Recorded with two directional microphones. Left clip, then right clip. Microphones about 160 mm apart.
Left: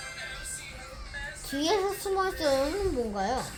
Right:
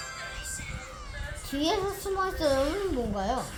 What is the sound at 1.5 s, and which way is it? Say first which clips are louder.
A child's voice: left 1 dB; 40° left (ahead or behind).